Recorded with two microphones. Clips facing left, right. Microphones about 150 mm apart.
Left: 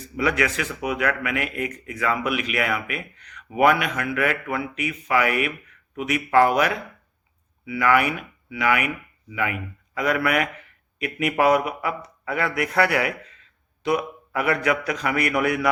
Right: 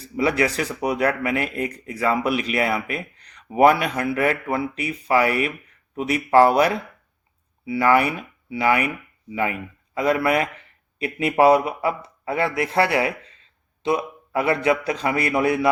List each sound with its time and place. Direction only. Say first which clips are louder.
0.0 s speech: right 2 dB; 30° right (ahead or behind)